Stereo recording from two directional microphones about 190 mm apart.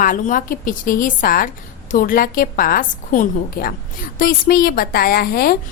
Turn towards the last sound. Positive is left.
turn(degrees=55)  # may be behind; listen again after turning